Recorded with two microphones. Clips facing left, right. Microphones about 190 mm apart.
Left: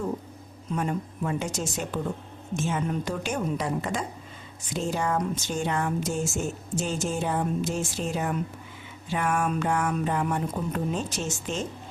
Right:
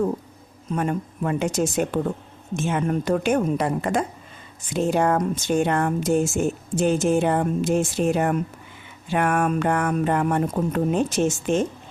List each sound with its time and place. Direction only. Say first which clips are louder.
0.7 s speech: right 4 dB; 55° right (ahead or behind)